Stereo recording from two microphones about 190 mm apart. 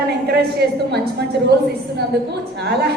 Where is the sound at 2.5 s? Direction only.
60° right (ahead or behind).